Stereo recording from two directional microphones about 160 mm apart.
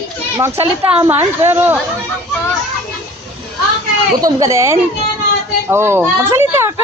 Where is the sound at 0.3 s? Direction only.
15° right (ahead or behind).